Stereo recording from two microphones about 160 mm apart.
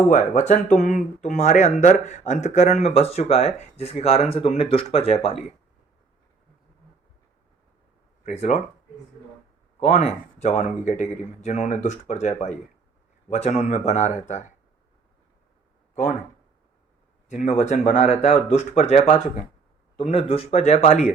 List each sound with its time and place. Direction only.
0.1 s speech: 50° left (ahead or behind)
8.2 s speech: 45° left (ahead or behind)
9.8 s speech: 45° left (ahead or behind)
17.2 s speech: 45° left (ahead or behind)